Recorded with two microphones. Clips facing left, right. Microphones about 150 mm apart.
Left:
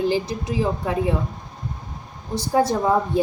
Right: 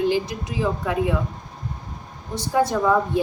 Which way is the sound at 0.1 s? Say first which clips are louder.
Left 1 dB; 35° left (ahead or behind).